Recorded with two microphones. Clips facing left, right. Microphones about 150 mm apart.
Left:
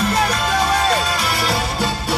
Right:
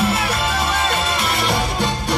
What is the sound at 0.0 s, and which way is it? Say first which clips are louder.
Music: left 1 dB; 5° right (ahead or behind).